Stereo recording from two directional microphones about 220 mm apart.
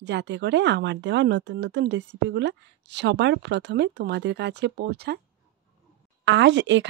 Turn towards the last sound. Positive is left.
turn(degrees=-55)  # may be behind; listen again after turning